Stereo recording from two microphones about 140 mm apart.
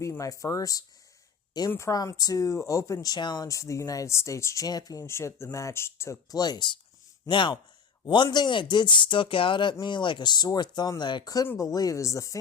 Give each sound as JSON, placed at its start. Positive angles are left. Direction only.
{"t": 0.0, "sound": "speech", "side_deg": 20}